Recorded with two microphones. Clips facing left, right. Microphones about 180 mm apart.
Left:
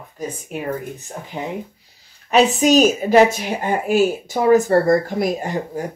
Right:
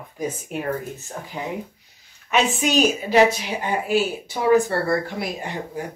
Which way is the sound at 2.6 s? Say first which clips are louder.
Left 6 dB; 40° left (ahead or behind).